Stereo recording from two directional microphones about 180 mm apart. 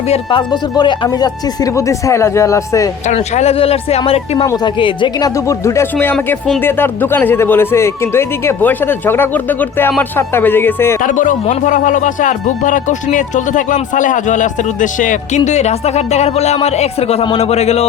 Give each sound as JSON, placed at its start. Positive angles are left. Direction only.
{"t": 0.1, "sound": "speech", "side_deg": 25}
{"t": 3.1, "sound": "speech", "side_deg": 40}
{"t": 11.0, "sound": "speech", "side_deg": 45}